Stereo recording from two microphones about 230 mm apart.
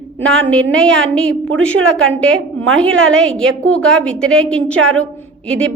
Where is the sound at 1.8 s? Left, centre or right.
Right.